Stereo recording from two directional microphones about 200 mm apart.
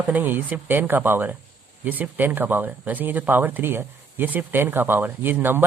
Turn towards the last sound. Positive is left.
turn(degrees=-10)  # may be behind; listen again after turning